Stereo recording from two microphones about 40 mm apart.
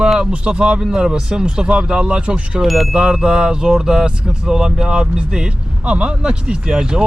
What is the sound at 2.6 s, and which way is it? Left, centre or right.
Speech, centre.